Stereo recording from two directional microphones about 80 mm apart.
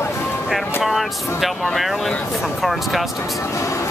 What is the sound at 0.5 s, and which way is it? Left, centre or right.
Speech, centre.